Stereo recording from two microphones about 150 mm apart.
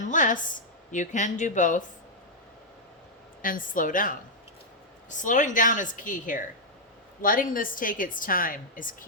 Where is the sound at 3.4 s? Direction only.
65° left (ahead or behind).